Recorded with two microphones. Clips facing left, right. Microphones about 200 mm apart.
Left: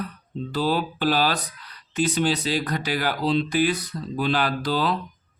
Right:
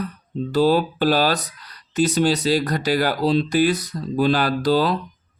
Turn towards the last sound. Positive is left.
turn(degrees=-40)  # may be behind; listen again after turning